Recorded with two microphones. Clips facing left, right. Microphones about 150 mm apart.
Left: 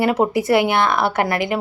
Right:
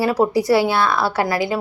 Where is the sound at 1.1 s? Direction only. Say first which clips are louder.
Even; 55° left (ahead or behind).